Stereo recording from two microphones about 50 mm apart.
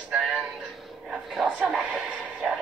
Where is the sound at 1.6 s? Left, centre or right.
Centre.